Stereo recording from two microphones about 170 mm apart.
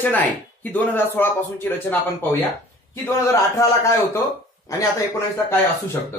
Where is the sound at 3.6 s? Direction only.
15° left (ahead or behind).